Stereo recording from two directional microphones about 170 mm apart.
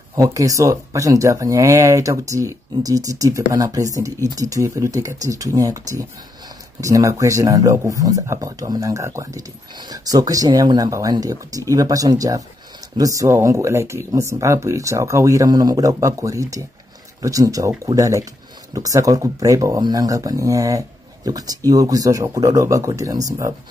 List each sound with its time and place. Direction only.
0.1 s speech: 20° right (ahead or behind)